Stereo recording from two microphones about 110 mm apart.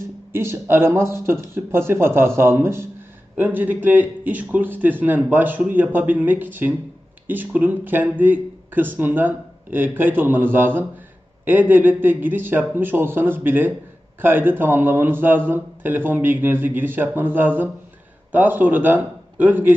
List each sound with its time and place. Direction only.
0.0 s a man's voice: 20° right (ahead or behind)